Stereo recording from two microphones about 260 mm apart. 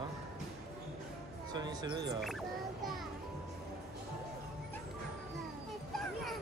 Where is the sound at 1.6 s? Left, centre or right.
Centre.